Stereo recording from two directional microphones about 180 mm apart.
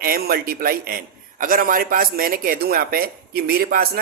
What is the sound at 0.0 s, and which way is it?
A man's voice, 55° right (ahead or behind).